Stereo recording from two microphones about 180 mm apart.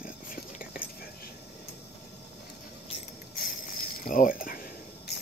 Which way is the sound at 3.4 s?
55° left (ahead or behind).